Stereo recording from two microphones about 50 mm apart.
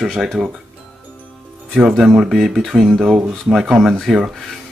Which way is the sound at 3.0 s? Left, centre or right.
Centre.